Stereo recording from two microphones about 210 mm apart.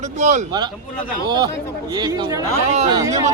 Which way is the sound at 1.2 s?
20° right (ahead or behind).